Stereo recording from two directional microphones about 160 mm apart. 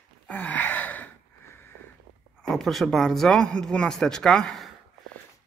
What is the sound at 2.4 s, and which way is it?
Speech, centre (ahead or behind).